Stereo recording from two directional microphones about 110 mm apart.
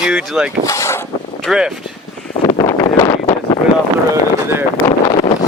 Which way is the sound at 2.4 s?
40° left (ahead or behind).